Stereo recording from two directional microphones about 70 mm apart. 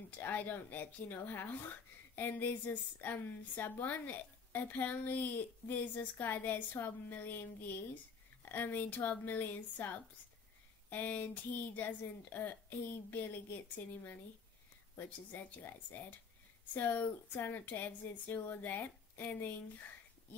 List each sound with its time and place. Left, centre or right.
0.1 s a woman's voice: left
15.0 s a woman's voice: left